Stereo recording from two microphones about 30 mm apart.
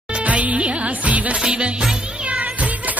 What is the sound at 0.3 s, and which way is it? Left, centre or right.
Music, right.